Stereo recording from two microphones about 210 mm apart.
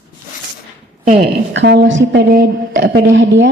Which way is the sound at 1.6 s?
55° right (ahead or behind).